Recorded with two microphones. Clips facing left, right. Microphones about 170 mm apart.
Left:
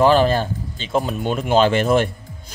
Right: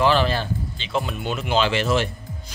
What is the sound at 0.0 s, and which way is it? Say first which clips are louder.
Speech: left 5 dB; 45° left (ahead or behind).